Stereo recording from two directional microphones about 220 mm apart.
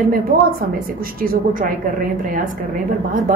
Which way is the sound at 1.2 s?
40° right (ahead or behind).